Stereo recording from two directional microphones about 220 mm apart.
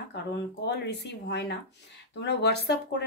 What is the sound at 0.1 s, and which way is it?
A woman's voice, 50° left (ahead or behind).